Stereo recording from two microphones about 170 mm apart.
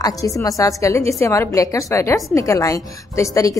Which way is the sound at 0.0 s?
20° left (ahead or behind).